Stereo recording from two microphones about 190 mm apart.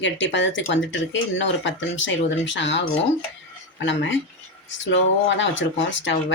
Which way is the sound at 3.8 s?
75° left (ahead or behind).